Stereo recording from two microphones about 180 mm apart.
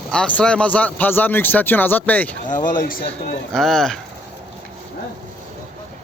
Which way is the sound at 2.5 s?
50° left (ahead or behind).